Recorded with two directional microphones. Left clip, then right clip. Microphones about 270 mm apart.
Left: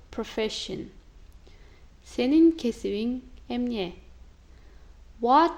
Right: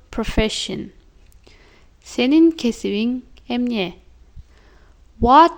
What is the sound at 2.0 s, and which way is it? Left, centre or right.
Speech, right.